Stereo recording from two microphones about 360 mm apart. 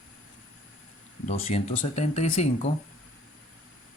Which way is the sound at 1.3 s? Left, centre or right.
Centre.